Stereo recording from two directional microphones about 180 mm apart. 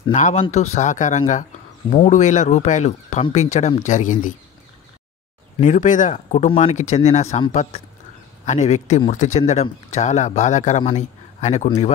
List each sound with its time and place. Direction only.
0.1 s speech: 40° left (ahead or behind)
5.6 s speech: 45° left (ahead or behind)
8.5 s speech: 40° left (ahead or behind)